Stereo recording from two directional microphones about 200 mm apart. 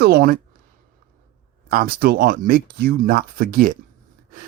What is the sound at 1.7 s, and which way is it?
Speech, 50° right (ahead or behind).